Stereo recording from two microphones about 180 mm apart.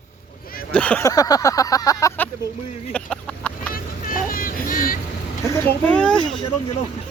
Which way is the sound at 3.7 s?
50° left (ahead or behind).